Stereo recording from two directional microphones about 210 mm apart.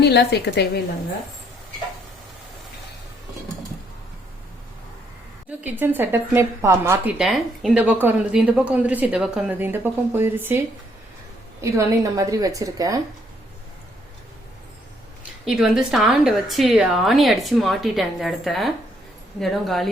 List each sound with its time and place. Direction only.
0.0 s a woman's voice: 50° left (ahead or behind)
5.5 s a woman's voice: 10° right (ahead or behind)
11.6 s a woman's voice: 15° right (ahead or behind)
15.4 s a woman's voice: centre (ahead or behind)